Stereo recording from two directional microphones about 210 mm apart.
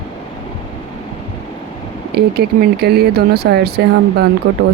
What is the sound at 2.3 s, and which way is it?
Speech, 50° right (ahead or behind).